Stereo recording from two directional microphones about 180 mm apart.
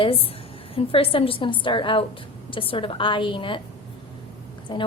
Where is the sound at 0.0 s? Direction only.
30° left (ahead or behind).